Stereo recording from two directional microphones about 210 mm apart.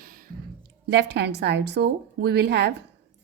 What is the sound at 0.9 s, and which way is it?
Speech, 55° right (ahead or behind).